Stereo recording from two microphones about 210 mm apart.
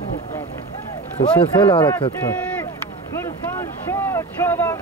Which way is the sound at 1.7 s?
20° left (ahead or behind).